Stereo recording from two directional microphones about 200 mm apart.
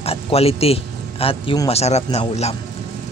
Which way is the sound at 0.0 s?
30° left (ahead or behind).